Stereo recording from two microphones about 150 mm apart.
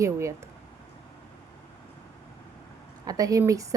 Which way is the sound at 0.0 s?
20° right (ahead or behind).